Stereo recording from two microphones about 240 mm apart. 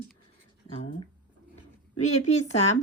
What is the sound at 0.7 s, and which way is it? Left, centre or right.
Speech, left.